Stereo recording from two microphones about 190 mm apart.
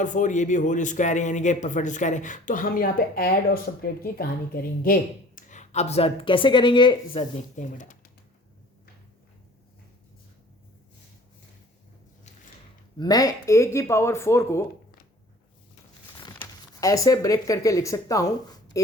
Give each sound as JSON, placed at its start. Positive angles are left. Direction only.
{"t": 0.0, "sound": "speech", "side_deg": 40}
{"t": 13.0, "sound": "speech", "side_deg": 20}
{"t": 16.4, "sound": "speech", "side_deg": 15}